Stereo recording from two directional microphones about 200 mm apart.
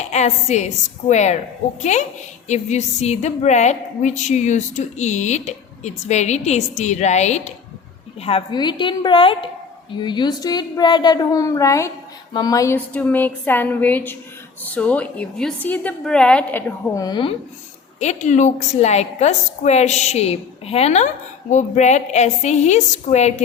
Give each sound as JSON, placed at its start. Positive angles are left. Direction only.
{"t": 0.0, "sound": "a woman's voice", "side_deg": 35}
{"t": 17.0, "sound": "a woman's voice", "side_deg": 20}
{"t": 18.0, "sound": "a woman's voice", "side_deg": 35}